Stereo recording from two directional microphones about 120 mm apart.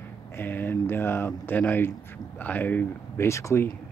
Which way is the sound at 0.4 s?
15° left (ahead or behind).